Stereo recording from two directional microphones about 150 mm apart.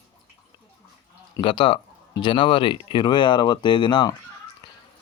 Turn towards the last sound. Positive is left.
turn(degrees=30)  # may be behind; listen again after turning